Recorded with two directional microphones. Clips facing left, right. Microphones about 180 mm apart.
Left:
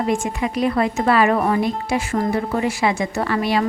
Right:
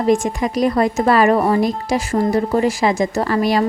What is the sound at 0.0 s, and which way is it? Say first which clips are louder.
A woman's voice: right 5 dB; 40° right (ahead or behind).